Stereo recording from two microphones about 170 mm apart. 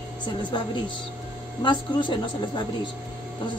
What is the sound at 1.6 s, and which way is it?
Speech, 30° left (ahead or behind).